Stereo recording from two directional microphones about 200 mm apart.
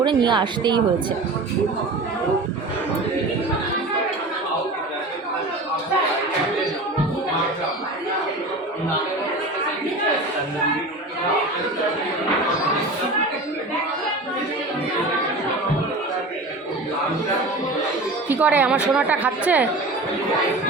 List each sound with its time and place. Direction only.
0.0 s speech: 20° right (ahead or behind)
18.3 s a woman's voice: 10° right (ahead or behind)